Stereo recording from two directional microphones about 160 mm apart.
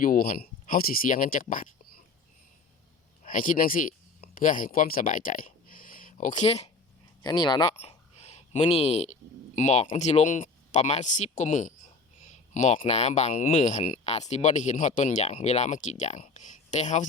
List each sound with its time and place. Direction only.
0.0 s speech: 60° left (ahead or behind)
3.2 s speech: 55° left (ahead or behind)
6.4 s speech: 40° left (ahead or behind)
7.2 s speech: 25° left (ahead or behind)
7.8 s hiccup: 40° left (ahead or behind)
9.6 s speech: 50° left (ahead or behind)
12.2 s a sound: 50° left (ahead or behind)
12.8 s speech: 45° left (ahead or behind)